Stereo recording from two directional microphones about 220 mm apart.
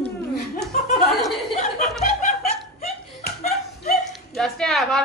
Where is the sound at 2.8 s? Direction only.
45° left (ahead or behind).